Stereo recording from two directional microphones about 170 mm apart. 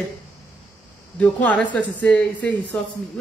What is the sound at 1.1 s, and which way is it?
Speech, 10° left (ahead or behind).